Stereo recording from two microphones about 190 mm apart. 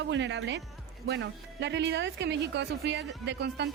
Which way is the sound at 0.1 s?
70° right (ahead or behind).